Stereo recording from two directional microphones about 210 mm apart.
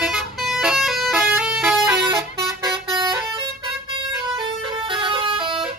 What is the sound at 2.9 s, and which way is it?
Vehicle, 20° right (ahead or behind).